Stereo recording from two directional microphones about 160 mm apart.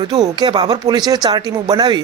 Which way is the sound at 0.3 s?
25° right (ahead or behind).